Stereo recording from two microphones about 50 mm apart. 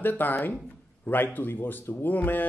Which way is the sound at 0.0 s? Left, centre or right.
Left.